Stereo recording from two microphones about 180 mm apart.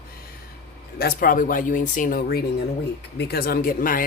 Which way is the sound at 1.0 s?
55° left (ahead or behind).